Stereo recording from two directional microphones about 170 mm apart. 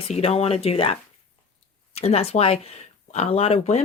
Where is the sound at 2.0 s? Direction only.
35° left (ahead or behind).